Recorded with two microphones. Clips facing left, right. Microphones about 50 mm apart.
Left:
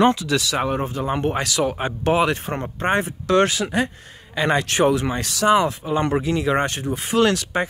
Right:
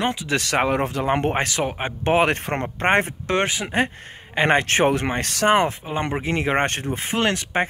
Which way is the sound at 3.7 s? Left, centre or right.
Right.